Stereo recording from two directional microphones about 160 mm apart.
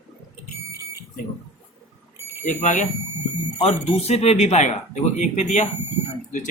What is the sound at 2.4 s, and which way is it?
Speech, 50° left (ahead or behind).